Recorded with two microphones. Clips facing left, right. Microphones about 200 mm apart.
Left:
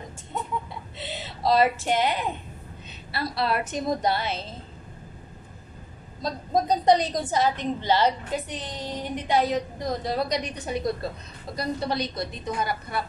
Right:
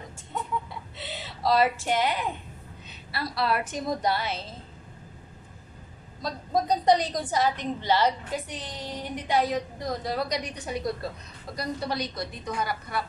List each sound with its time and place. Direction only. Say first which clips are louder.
0.9 s a woman's voice: left 4 dB; 20° left (ahead or behind)
6.2 s a woman's voice: left 2 dB; 20° left (ahead or behind)